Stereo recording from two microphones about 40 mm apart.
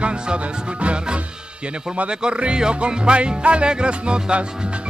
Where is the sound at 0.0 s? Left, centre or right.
Right.